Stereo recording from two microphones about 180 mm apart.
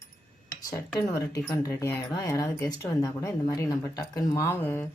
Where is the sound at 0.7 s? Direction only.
20° left (ahead or behind).